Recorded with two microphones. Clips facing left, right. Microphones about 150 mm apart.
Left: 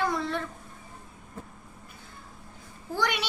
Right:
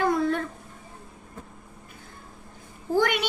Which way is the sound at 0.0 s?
50° right (ahead or behind).